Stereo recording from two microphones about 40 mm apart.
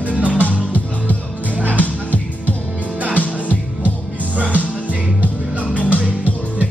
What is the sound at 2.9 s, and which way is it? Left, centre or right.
Music, right.